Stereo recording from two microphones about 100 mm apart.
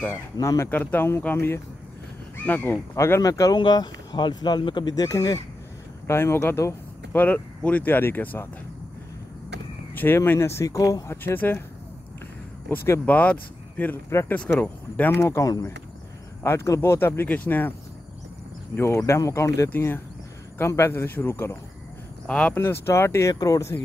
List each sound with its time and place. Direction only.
0.4 s speech: 30° left (ahead or behind)
0.7 s speech: 20° left (ahead or behind)
3.2 s speech: 35° left (ahead or behind)
3.5 s speech: 45° left (ahead or behind)
6.0 s speech: 25° left (ahead or behind)
9.9 s speech: 20° left (ahead or behind); by 11.1 s 35° left (ahead or behind)
11.1 s speech: 20° left (ahead or behind)
12.6 s speech: 25° left (ahead or behind)
15.3 s speech: 40° left (ahead or behind); by 17.7 s 20° left (ahead or behind)
18.8 s speech: 30° left (ahead or behind)
19.7 s speech: 20° left (ahead or behind)
22.3 s speech: 10° left (ahead or behind)
22.6 s speech: 25° left (ahead or behind)